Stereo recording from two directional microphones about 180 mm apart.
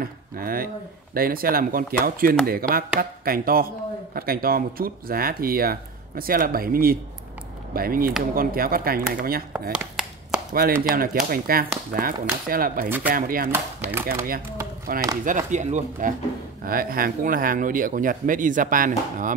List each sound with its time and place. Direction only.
0.0 s speech: 55° right (ahead or behind)
9.5 s a sound: 5° right (ahead or behind)
10.5 s speech: 55° right (ahead or behind)
13.5 s speech: 15° right (ahead or behind)
14.0 s speech: 55° right (ahead or behind)